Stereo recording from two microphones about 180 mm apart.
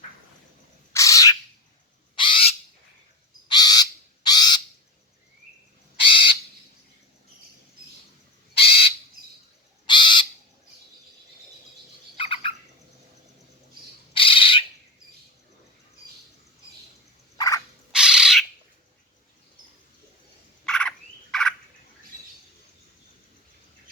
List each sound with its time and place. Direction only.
0.9 s bird: 20° left (ahead or behind)
3.5 s crow: 20° left (ahead or behind)
6.0 s bird: 30° left (ahead or behind)
8.5 s bird: 30° left (ahead or behind)
12.1 s bird: 30° left (ahead or behind)
14.1 s bird: 30° left (ahead or behind)
17.3 s turkey: 20° left (ahead or behind)
17.9 s bird: 5° right (ahead or behind)
20.7 s frog: 5° left (ahead or behind)